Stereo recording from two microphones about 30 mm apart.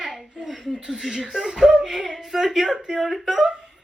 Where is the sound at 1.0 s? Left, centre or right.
Centre.